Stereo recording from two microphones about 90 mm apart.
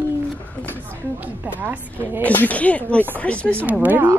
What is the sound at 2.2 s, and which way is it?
Speech, 15° left (ahead or behind).